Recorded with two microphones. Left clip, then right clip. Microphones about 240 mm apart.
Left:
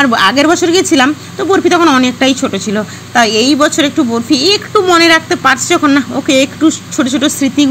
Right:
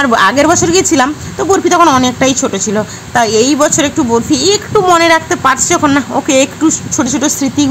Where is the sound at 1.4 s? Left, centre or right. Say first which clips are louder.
Right 1 dB; right.